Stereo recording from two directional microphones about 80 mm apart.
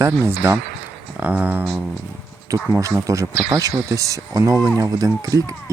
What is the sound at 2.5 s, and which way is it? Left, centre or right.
Speech, right.